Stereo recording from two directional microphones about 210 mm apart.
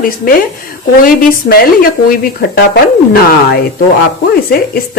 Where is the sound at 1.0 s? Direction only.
45° left (ahead or behind).